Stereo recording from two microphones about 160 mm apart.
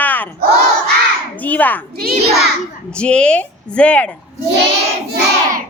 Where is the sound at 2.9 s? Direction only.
5° left (ahead or behind).